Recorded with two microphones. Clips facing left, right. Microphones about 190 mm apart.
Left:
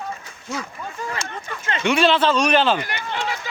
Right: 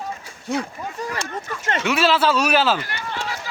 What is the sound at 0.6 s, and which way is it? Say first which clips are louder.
Speech: right 2 dB; 35° right (ahead or behind).